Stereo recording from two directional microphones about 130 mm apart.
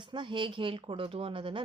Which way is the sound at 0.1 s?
40° right (ahead or behind).